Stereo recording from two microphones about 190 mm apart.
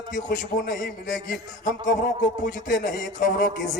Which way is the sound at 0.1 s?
45° left (ahead or behind).